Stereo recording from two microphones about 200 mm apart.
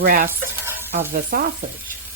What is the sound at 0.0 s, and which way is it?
Speech, 45° right (ahead or behind).